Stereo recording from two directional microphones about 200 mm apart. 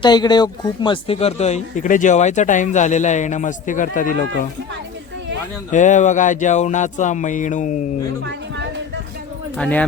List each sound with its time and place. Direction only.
0.0 s speech: 20° left (ahead or behind); by 4.2 s 40° left (ahead or behind)
5.7 s speech: 40° left (ahead or behind)
9.6 s speech: 5° left (ahead or behind)